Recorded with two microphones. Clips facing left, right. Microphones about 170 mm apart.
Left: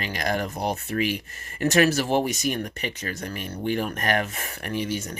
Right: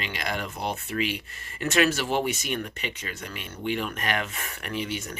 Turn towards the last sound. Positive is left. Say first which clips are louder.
# left 3 dB
turn(degrees=40)  # may be behind; listen again after turning